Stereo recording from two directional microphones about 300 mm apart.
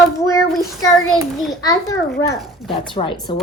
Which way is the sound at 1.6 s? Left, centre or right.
Centre.